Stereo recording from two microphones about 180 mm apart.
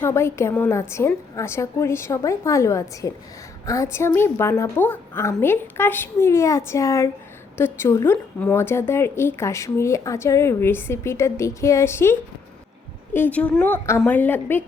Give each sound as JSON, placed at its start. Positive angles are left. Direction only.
{"t": 0.0, "sound": "a woman's voice", "side_deg": 15}
{"t": 13.1, "sound": "a woman's voice", "side_deg": 10}